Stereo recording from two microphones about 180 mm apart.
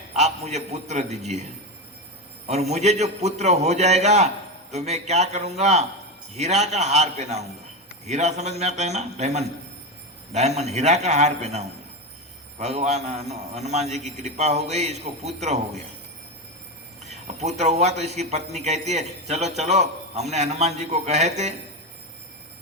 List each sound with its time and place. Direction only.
0.2 s a man's voice: 40° right (ahead or behind)
2.5 s a man's voice: 35° right (ahead or behind)
17.1 s a man's voice: 40° right (ahead or behind)